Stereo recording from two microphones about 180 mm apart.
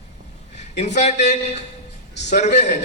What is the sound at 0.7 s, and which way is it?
A man's voice, 40° left (ahead or behind).